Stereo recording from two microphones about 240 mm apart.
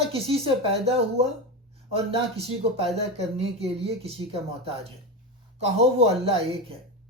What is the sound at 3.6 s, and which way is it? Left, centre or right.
Speech, right.